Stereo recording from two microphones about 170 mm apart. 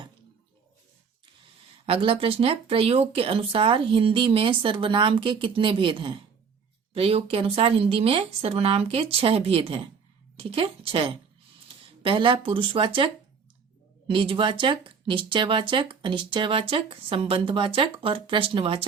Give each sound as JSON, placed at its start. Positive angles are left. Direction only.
{"t": 1.9, "sound": "speech", "side_deg": -30}
{"t": 14.1, "sound": "speech", "side_deg": -30}